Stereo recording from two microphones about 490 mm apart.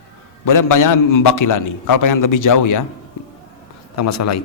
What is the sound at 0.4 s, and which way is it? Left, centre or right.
A man's voice, left.